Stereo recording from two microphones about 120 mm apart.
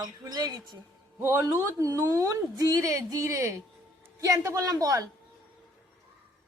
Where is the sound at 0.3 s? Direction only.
35° right (ahead or behind).